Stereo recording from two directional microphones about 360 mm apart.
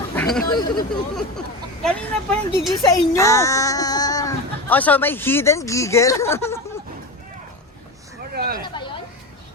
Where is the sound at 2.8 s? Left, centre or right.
Centre.